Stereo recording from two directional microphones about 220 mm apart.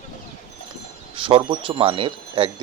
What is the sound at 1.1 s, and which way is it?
Speech, 25° right (ahead or behind).